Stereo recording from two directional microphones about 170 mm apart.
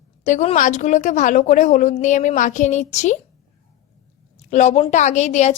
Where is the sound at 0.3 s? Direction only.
45° left (ahead or behind).